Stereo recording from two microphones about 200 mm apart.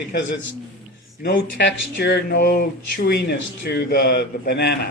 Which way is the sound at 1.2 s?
55° left (ahead or behind).